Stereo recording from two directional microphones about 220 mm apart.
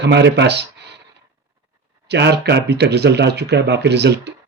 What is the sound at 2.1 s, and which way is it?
Speech, 50° right (ahead or behind).